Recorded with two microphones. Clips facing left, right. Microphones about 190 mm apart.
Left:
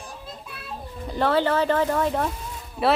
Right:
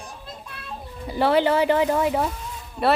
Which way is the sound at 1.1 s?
10° right (ahead or behind).